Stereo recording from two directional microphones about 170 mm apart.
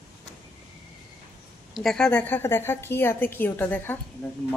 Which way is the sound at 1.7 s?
Centre (ahead or behind).